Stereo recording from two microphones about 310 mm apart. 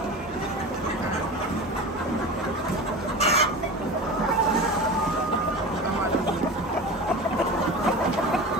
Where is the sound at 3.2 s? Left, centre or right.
Centre.